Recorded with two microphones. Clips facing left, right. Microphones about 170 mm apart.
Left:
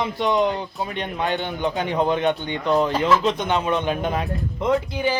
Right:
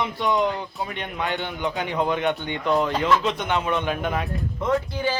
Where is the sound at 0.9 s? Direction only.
35° left (ahead or behind).